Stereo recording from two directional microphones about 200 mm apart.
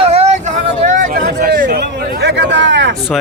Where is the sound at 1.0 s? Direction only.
45° right (ahead or behind); by 2.9 s 65° right (ahead or behind).